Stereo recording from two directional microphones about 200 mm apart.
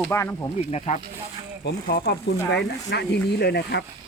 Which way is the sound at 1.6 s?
55° left (ahead or behind).